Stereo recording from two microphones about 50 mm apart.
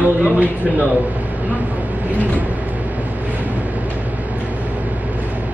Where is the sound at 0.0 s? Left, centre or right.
Right.